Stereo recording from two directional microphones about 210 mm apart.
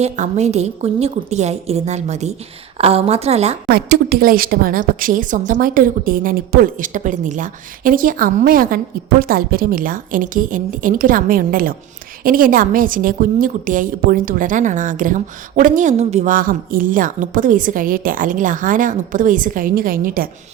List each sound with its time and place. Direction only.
0.0 s a woman's voice: 30° right (ahead or behind)
3.7 s a woman's voice: 45° right (ahead or behind)